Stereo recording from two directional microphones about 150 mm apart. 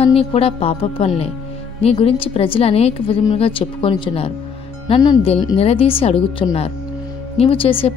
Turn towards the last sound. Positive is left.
turn(degrees=35)  # may be behind; listen again after turning